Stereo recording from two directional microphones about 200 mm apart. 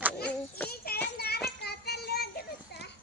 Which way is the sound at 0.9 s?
50° left (ahead or behind).